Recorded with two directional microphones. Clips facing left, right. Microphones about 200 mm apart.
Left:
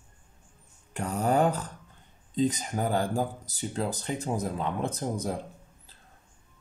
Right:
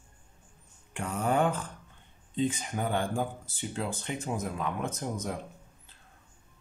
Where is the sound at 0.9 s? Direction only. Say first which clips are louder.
Left 3 dB; 40° left (ahead or behind).